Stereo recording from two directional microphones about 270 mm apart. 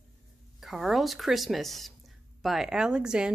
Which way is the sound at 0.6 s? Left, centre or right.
Centre.